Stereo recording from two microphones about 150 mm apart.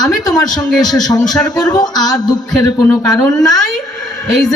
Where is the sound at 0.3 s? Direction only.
25° left (ahead or behind).